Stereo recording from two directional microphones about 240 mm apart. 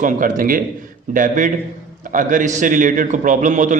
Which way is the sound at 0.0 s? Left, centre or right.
Right.